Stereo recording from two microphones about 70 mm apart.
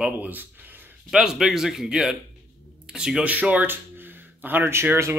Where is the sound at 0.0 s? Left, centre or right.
Right.